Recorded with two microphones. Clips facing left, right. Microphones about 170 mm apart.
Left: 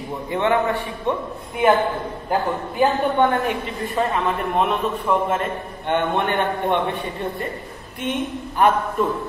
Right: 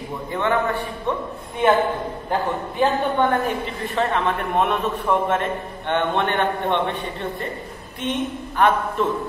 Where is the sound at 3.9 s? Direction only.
5° left (ahead or behind).